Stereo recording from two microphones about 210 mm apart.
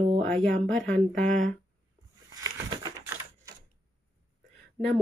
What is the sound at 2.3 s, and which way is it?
Typewriter, 20° right (ahead or behind).